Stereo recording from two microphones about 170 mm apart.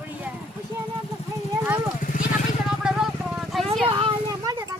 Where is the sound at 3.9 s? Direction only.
25° right (ahead or behind).